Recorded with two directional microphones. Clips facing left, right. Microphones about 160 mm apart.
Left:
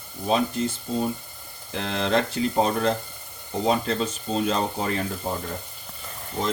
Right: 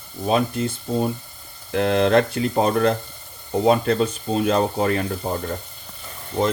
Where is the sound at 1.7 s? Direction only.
60° right (ahead or behind).